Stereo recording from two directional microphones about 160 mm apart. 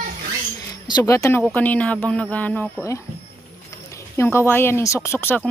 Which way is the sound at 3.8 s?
15° left (ahead or behind).